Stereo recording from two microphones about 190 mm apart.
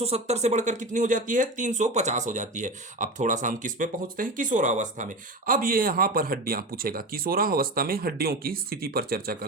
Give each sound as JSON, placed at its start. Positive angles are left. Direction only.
{"t": 0.0, "sound": "speech", "side_deg": -35}